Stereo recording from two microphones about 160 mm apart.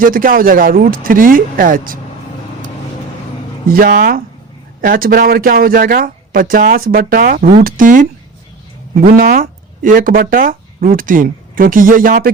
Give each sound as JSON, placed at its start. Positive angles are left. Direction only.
{"t": 0.0, "sound": "speech", "side_deg": -60}
{"t": 3.7, "sound": "speech", "side_deg": -65}
{"t": 7.6, "sound": "speech", "side_deg": -60}
{"t": 9.0, "sound": "speech", "side_deg": -65}